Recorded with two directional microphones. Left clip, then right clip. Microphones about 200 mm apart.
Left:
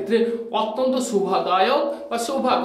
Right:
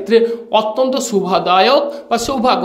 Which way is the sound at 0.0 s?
45° right (ahead or behind).